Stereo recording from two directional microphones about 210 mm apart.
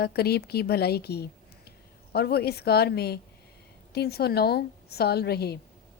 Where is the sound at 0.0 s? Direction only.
50° left (ahead or behind).